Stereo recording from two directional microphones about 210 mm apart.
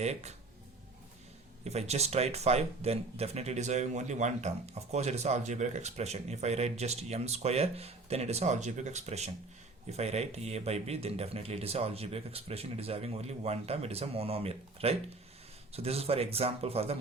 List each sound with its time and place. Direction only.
0.0 s speech: 30° right (ahead or behind)
1.6 s speech: 30° right (ahead or behind)